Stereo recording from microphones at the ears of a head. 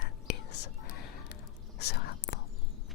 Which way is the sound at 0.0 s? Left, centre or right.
Left.